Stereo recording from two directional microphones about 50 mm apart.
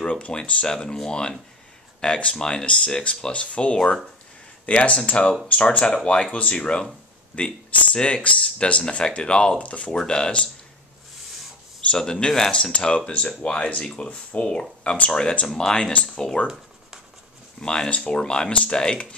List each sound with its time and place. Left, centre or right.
0.0 s speech: left
4.6 s speech: left
9.9 s speech: centre
11.9 s speech: centre
16.4 s speech: left
17.6 s speech: centre